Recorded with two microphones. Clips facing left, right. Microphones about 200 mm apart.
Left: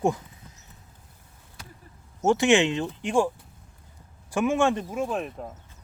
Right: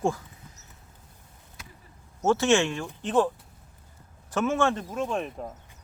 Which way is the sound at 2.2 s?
15° left (ahead or behind).